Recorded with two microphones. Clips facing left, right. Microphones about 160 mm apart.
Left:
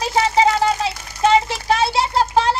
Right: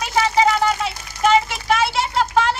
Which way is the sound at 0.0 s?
30° left (ahead or behind).